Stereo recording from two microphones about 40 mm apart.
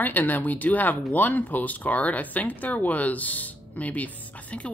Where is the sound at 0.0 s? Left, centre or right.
Left.